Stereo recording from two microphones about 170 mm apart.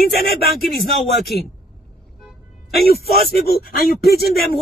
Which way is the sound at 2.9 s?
Centre (ahead or behind).